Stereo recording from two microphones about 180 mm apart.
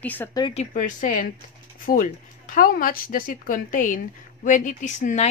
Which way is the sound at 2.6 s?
50° left (ahead or behind).